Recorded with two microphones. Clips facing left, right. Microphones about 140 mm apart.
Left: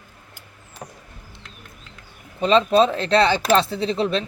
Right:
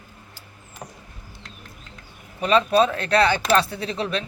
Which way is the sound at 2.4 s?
25° left (ahead or behind).